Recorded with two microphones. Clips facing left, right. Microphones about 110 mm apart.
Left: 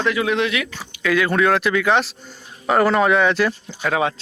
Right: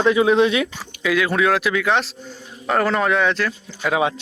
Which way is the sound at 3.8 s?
15° right (ahead or behind).